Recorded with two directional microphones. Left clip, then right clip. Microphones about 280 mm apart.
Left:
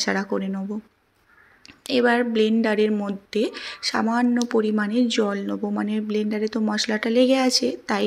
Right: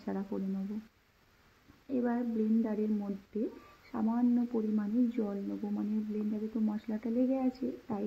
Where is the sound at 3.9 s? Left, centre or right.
Left.